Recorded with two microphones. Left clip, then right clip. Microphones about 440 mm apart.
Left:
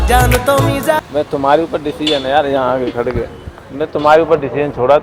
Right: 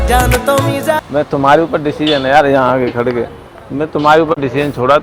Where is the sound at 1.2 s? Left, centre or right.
Right.